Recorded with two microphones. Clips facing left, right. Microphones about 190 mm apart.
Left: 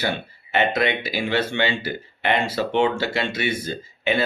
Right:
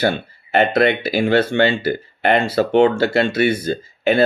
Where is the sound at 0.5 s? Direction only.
55° right (ahead or behind).